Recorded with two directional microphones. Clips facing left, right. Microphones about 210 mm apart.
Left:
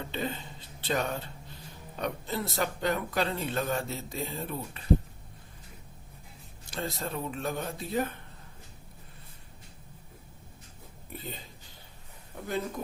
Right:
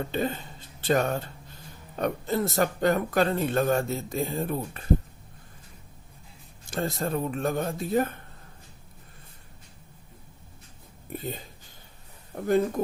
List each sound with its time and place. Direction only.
0.0 s speech: 45° right (ahead or behind)
6.7 s speech: 50° right (ahead or behind)
11.2 s speech: 50° right (ahead or behind)